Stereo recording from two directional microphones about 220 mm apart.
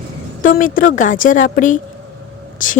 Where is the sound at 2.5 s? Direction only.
35° left (ahead or behind).